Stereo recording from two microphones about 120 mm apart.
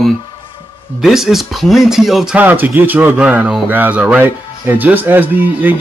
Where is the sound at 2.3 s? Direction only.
15° right (ahead or behind).